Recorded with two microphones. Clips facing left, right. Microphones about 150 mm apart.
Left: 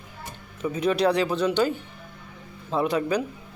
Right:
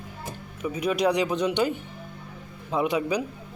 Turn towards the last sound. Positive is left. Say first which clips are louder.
# left 1 dB
turn(degrees=-10)  # may be behind; listen again after turning